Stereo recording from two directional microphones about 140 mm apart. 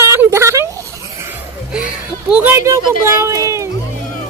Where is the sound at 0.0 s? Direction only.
20° right (ahead or behind).